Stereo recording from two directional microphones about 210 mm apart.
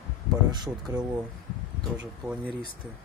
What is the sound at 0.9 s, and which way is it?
Speech, 15° right (ahead or behind).